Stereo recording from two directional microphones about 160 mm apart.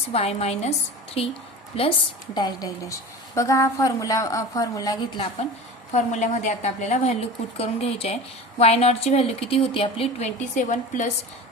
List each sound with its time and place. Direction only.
0.1 s a woman's voice: 40° left (ahead or behind)
1.7 s a woman's voice: 35° left (ahead or behind)
2.3 s a woman's voice: 25° left (ahead or behind)
5.9 s a woman's voice: 45° left (ahead or behind)